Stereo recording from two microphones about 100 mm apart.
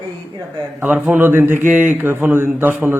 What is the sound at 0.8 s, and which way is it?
A man's voice, 20° right (ahead or behind).